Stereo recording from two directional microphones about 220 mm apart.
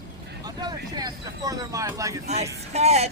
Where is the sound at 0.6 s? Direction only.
15° right (ahead or behind).